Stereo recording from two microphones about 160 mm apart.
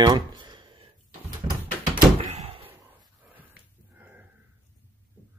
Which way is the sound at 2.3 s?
35° right (ahead or behind).